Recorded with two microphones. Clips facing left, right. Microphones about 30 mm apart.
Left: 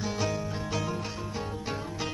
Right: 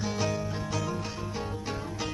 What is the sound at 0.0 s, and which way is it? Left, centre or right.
Music, centre.